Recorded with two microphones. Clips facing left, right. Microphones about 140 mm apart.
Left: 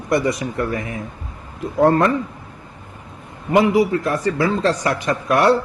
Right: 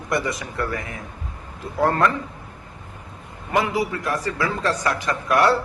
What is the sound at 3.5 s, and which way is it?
Speech, 25° left (ahead or behind).